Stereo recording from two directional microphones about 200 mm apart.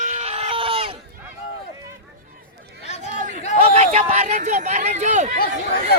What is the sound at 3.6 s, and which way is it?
Speech, 30° right (ahead or behind).